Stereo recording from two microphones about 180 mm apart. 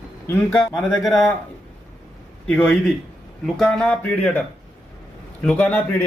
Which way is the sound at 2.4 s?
10° left (ahead or behind).